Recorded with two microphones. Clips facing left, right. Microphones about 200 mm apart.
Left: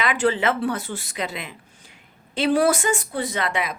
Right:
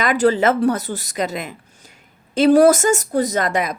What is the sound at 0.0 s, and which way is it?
A woman's voice, 40° right (ahead or behind).